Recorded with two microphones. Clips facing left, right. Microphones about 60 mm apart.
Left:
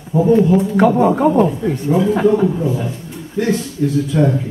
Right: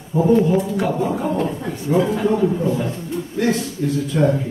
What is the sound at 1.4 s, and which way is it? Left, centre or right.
A man's voice, centre.